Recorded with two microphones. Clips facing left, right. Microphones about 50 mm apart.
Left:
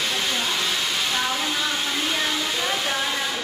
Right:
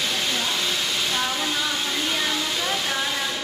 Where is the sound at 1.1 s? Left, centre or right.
Centre.